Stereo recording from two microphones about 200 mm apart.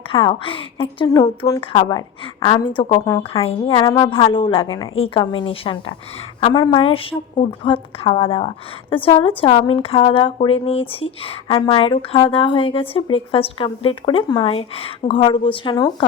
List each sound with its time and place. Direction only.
0.1 s a woman's voice: 25° left (ahead or behind)